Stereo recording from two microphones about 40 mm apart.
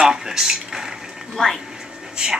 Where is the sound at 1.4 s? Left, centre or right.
Centre.